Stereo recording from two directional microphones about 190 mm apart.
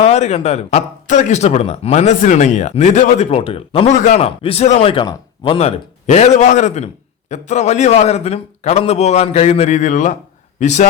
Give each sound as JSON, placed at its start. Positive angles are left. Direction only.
{"t": 0.0, "sound": "speech", "side_deg": 35}